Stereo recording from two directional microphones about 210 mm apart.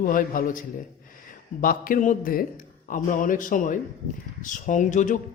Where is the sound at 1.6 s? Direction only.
40° left (ahead or behind).